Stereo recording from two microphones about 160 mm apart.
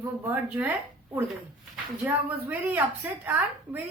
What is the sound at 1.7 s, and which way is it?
A woman's voice, 10° right (ahead or behind).